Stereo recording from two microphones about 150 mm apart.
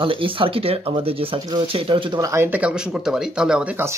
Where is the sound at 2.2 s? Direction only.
20° right (ahead or behind).